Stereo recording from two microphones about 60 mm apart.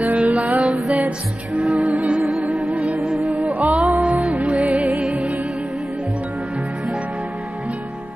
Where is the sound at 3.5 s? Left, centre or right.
Right.